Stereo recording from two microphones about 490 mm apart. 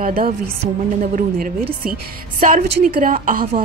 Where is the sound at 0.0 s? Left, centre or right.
Centre.